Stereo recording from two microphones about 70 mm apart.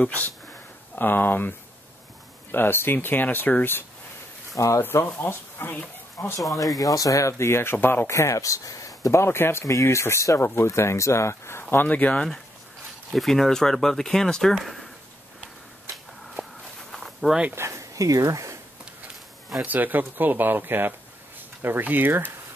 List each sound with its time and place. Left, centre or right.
0.0 s speech: left
2.5 s speech: left
4.6 s speech: left
4.8 s speech: left
6.8 s speech: left
8.1 s speech: left; by 12.3 s centre
13.1 s speech: centre
16.9 s walk: centre
17.6 s speech: right
19.6 s speech: right